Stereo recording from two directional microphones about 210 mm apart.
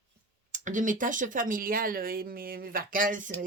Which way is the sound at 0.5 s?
35° right (ahead or behind).